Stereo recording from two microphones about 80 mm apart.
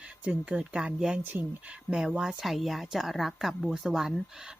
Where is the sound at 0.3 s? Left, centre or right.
Centre.